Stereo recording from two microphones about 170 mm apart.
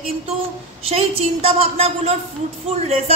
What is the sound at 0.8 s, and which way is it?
A woman's voice, 35° right (ahead or behind).